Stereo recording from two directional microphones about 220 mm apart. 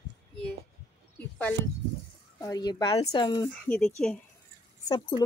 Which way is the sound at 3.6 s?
5° left (ahead or behind).